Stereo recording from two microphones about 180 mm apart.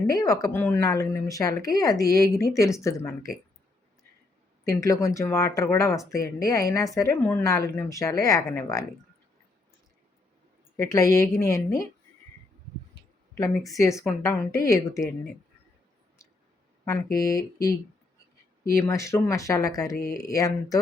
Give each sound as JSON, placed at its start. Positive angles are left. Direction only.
{"t": 0.1, "sound": "a woman's voice", "side_deg": 20}
{"t": 4.7, "sound": "speech", "side_deg": 15}
{"t": 10.8, "sound": "a woman's voice", "side_deg": 20}
{"t": 12.9, "sound": "a sound", "side_deg": 70}
{"t": 13.7, "sound": "speech", "side_deg": 15}
{"t": 16.8, "sound": "a woman's voice", "side_deg": 15}
{"t": 18.8, "sound": "a woman's voice", "side_deg": 15}